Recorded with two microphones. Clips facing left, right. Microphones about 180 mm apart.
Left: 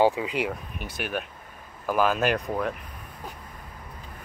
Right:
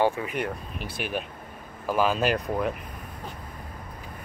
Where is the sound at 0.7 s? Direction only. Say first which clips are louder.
Even; 50° left (ahead or behind).